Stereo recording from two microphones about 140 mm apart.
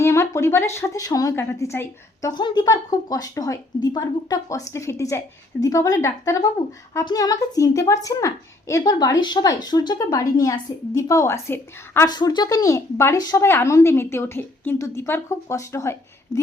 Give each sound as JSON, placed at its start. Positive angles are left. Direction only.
{"t": 0.0, "sound": "speech", "side_deg": 20}
{"t": 12.0, "sound": "speech", "side_deg": 30}